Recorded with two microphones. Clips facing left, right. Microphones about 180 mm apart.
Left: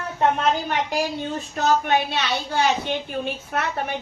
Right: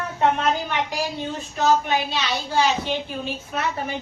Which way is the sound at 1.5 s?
55° left (ahead or behind).